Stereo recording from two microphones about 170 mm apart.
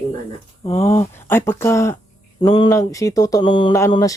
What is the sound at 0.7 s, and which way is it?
Speech, 15° left (ahead or behind).